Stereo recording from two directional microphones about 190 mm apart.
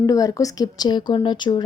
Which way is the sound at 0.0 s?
20° left (ahead or behind).